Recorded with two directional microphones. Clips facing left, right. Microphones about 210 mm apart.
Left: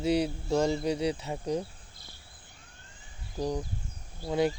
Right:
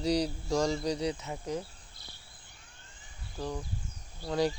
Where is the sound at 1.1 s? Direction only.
30° left (ahead or behind).